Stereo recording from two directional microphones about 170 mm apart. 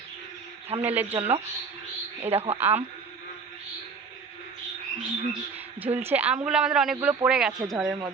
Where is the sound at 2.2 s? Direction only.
40° right (ahead or behind).